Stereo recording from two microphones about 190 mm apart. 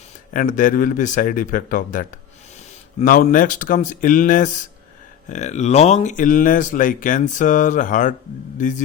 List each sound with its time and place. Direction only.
0.3 s speech: 45° left (ahead or behind)